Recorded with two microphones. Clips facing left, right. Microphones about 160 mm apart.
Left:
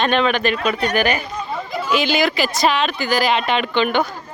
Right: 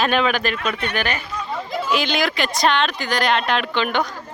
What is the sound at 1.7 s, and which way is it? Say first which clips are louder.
Speech: left 3 dB; centre (ahead or behind).